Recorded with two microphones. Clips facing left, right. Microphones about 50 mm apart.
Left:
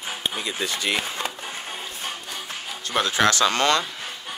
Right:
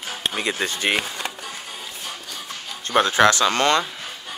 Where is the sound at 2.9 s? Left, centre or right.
Right.